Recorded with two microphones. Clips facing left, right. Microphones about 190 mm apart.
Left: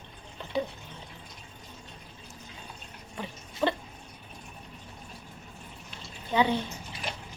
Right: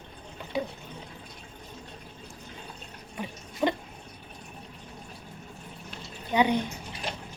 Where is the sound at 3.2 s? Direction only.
15° right (ahead or behind).